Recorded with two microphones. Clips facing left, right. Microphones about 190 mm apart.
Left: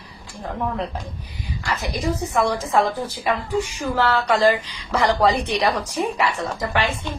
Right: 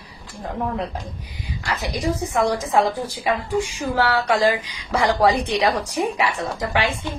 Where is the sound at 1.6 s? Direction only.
15° right (ahead or behind).